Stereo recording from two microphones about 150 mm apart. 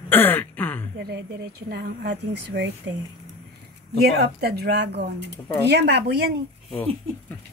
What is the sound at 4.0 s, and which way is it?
Speech, 90° right.